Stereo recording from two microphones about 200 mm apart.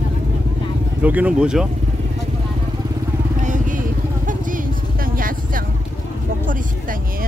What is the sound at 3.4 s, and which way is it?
Vehicle, 40° right (ahead or behind).